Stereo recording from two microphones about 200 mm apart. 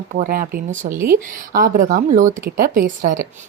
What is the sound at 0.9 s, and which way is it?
Speech, 10° right (ahead or behind).